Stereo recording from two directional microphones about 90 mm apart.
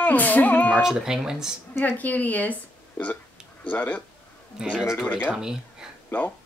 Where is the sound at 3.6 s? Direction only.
15° left (ahead or behind).